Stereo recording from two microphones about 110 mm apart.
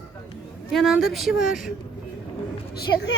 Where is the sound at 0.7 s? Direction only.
Centre (ahead or behind).